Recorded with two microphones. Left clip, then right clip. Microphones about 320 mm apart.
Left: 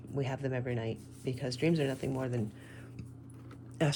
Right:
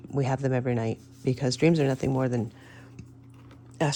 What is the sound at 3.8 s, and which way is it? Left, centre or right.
Speech, centre.